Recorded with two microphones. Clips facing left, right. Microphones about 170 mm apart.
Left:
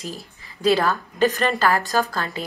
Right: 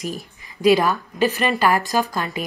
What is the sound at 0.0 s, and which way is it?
A woman's voice, 15° right (ahead or behind).